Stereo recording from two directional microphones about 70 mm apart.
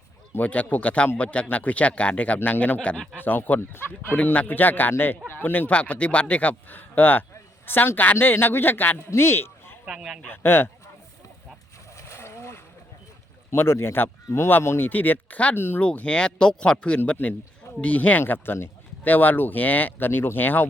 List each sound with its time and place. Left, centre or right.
0.3 s speech: left
9.8 s speech: centre
10.2 s speech: left
11.9 s boat: left
13.5 s speech: left
15.5 s speech: left
15.8 s speech: centre
17.2 s speech: left
17.7 s speech: centre